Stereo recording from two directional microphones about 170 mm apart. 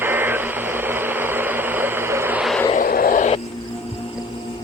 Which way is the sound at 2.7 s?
55° left (ahead or behind).